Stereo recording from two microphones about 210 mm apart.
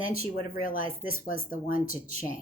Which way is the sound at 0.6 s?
40° left (ahead or behind).